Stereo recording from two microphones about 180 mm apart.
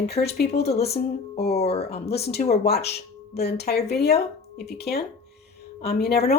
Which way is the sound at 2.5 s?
60° left (ahead or behind).